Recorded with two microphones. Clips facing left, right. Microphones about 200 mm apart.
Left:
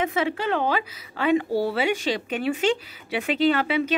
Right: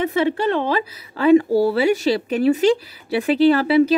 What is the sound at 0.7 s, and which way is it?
A woman's voice, 40° right (ahead or behind).